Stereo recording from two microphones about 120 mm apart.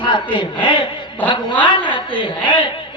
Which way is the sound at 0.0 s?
45° left (ahead or behind).